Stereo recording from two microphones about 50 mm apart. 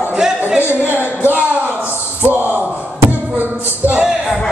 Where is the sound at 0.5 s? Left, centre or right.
Right.